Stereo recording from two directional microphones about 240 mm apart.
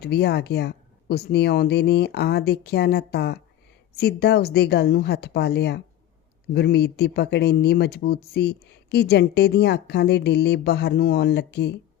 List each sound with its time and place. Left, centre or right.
0.0 s speech: left